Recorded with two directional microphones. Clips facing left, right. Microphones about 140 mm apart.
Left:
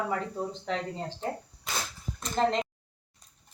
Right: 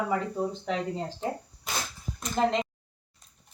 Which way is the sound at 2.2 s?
10° right (ahead or behind).